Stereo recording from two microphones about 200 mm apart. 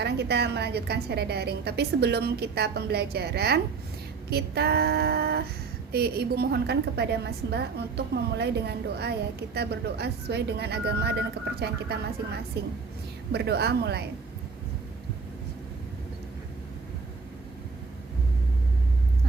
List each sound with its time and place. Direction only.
0.0 s a woman's voice: 55° right (ahead or behind)